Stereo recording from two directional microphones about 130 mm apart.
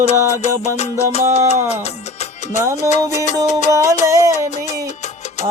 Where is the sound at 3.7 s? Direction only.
25° right (ahead or behind).